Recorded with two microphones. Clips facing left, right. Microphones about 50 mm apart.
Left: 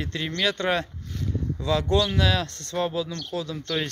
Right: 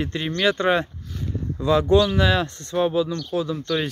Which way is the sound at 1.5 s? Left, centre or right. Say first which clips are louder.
Right 6 dB; centre.